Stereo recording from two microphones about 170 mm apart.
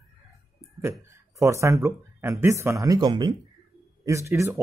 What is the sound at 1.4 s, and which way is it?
Speech, 15° right (ahead or behind).